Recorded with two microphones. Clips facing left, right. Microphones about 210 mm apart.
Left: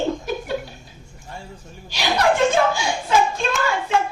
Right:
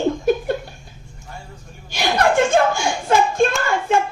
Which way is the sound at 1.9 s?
55° right (ahead or behind).